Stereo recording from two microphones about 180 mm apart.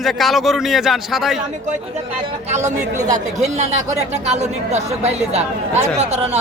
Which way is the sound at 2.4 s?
40° right (ahead or behind).